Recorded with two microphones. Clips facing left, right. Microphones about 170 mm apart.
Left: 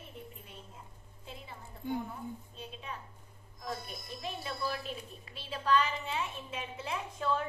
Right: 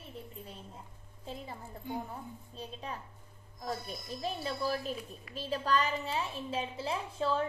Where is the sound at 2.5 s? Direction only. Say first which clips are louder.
Right 3 dB; 40° right (ahead or behind).